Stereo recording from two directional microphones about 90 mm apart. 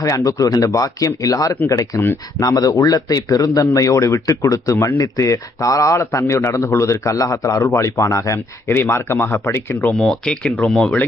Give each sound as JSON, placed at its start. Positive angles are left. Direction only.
{"t": 0.0, "sound": "speech", "side_deg": 40}
{"t": 9.8, "sound": "speech", "side_deg": 5}